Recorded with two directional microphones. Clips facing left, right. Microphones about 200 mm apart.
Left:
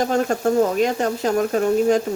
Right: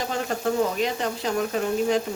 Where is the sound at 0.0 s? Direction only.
45° left (ahead or behind).